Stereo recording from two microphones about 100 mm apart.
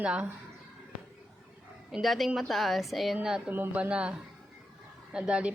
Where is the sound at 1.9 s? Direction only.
Centre (ahead or behind).